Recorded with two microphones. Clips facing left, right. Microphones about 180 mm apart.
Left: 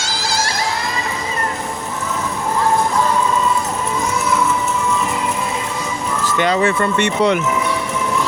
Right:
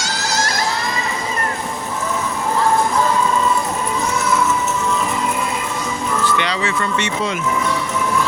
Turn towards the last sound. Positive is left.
turn(degrees=60)  # may be behind; listen again after turning